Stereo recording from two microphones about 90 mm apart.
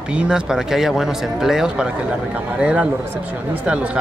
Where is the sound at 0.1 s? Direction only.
5° right (ahead or behind).